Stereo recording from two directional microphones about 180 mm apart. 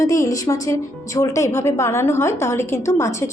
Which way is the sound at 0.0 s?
20° left (ahead or behind).